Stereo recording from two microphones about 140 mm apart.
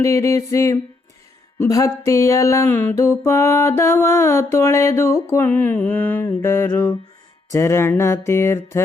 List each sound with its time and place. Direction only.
0.0 s mantra: 20° left (ahead or behind)